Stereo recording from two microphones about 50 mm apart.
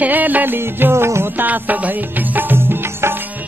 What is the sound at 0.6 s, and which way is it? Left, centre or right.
Music, right.